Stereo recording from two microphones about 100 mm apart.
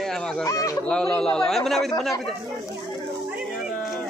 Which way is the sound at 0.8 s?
10° left (ahead or behind).